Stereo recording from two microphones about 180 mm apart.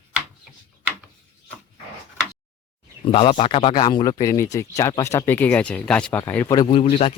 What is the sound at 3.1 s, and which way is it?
Speech, 30° left (ahead or behind).